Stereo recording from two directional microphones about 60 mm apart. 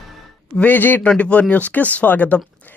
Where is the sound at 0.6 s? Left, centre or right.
Left.